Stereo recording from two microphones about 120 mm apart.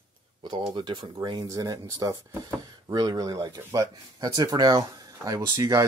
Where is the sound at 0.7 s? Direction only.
35° right (ahead or behind).